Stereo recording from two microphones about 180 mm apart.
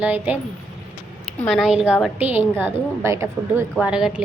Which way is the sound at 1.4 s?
Centre (ahead or behind).